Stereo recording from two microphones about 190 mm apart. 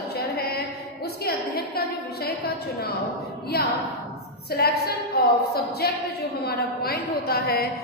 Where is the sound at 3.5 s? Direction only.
55° left (ahead or behind).